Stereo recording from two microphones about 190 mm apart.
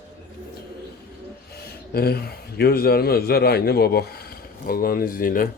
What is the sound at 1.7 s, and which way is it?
A man's voice, 55° left (ahead or behind).